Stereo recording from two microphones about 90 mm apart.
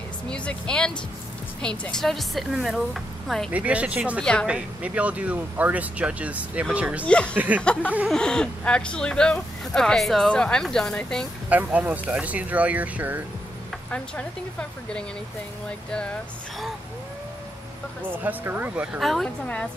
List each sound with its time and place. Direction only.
0.3 s a woman's voice: 10° left (ahead or behind)
3.5 s speech: 15° right (ahead or behind)
4.2 s speech: 10° left (ahead or behind)
4.5 s speech: 15° right (ahead or behind)
7.1 s speech: 10° left (ahead or behind)
7.3 s speech: 15° right (ahead or behind)
7.6 s speech: 10° left (ahead or behind)
11.4 s speech: 15° right (ahead or behind)
13.9 s speech: 10° left (ahead or behind)
18.0 s speech: 20° right (ahead or behind)
18.9 s a woman's voice: centre (ahead or behind)
19.2 s speech: 15° left (ahead or behind)